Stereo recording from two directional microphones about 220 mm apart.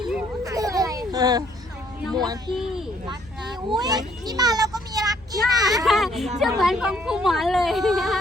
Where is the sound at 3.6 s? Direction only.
20° right (ahead or behind).